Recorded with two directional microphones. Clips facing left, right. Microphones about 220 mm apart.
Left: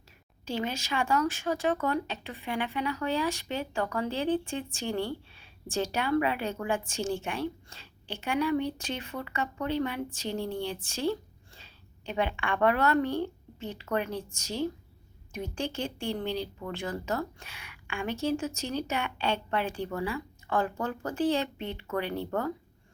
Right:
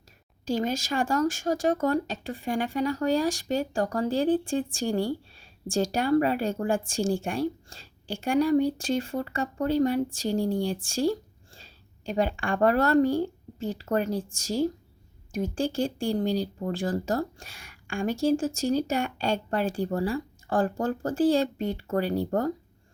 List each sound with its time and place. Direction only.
0.4 s speech: 45° right (ahead or behind)